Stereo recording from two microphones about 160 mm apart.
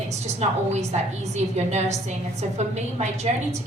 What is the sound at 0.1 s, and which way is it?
A woman's voice, 45° right (ahead or behind).